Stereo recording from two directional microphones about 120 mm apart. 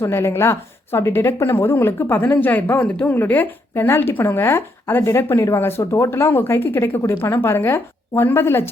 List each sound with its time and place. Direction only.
0.0 s speech: 20° left (ahead or behind)